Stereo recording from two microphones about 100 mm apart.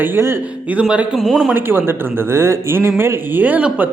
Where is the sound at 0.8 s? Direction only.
10° right (ahead or behind).